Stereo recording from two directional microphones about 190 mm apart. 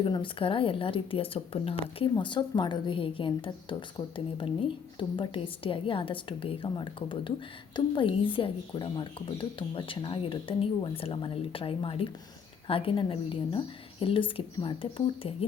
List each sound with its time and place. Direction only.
0.0 s speech: 25° left (ahead or behind)